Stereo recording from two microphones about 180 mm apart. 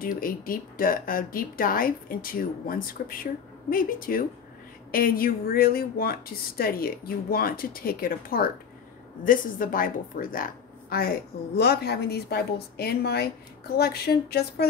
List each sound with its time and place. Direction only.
0.0 s a woman's voice: 50° left (ahead or behind)